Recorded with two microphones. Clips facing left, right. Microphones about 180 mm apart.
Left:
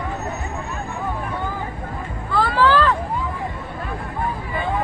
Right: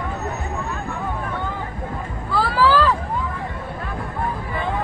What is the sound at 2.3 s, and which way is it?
Music, 5° right (ahead or behind).